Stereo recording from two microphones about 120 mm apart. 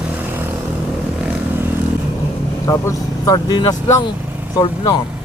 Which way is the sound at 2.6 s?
25° left (ahead or behind).